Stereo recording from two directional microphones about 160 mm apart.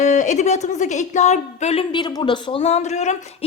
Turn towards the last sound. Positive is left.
turn(degrees=45)  # may be behind; listen again after turning